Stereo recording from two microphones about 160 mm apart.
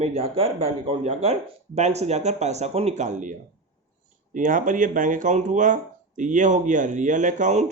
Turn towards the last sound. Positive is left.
turn(degrees=-50)  # may be behind; listen again after turning